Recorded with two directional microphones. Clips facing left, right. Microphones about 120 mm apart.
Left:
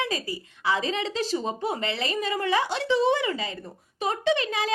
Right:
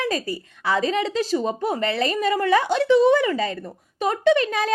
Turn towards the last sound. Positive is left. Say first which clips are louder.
# right 6 dB
turn(degrees=-50)  # may be behind; listen again after turning